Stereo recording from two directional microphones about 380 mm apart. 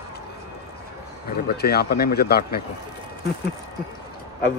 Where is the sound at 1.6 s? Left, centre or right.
Left.